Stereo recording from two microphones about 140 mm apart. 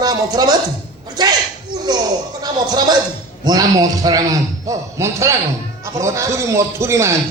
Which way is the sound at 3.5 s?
25° right (ahead or behind).